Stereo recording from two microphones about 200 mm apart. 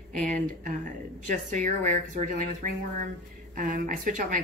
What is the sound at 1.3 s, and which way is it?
Speech, 40° right (ahead or behind).